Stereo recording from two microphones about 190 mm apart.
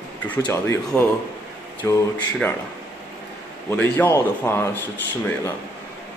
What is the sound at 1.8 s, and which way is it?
Speech, 15° left (ahead or behind).